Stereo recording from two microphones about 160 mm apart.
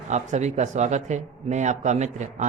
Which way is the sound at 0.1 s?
45° right (ahead or behind).